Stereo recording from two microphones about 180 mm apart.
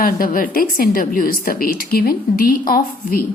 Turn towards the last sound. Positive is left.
turn(degrees=55)  # may be behind; listen again after turning